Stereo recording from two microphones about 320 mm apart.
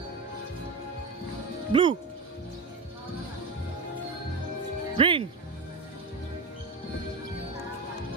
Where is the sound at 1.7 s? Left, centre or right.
Centre.